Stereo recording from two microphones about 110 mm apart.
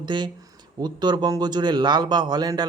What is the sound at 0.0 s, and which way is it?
A man's voice, 45° right (ahead or behind).